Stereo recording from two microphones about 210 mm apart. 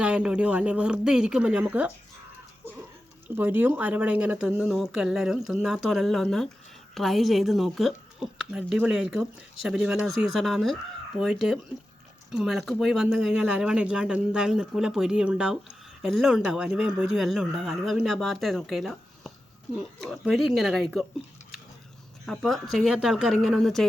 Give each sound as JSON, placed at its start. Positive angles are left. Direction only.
{"t": 0.0, "sound": "speech", "side_deg": -5}
{"t": 3.2, "sound": "speech", "side_deg": -10}
{"t": 22.3, "sound": "speech", "side_deg": 0}